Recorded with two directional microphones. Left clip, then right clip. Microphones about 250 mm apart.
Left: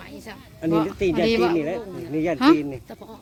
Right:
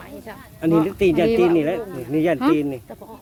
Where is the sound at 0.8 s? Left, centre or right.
Right.